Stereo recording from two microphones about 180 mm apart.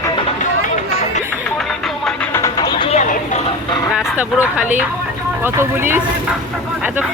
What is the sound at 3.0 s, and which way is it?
Vehicle, 45° left (ahead or behind).